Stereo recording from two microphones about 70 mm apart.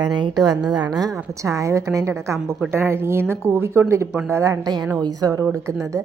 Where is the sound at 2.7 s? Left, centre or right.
Right.